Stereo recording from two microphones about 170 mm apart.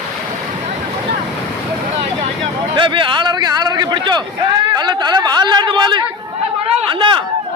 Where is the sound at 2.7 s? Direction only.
30° right (ahead or behind).